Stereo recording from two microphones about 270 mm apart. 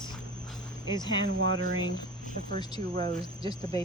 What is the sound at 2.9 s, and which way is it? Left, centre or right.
Speech, right.